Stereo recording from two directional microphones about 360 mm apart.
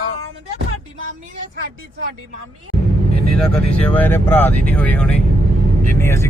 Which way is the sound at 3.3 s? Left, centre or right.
Centre.